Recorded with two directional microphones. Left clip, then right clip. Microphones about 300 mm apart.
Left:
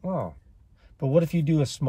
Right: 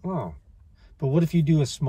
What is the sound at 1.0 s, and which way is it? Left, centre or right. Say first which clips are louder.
Speech: left 2 dB; centre.